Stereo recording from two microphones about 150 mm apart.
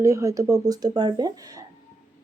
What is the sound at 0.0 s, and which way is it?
Speech, 20° right (ahead or behind).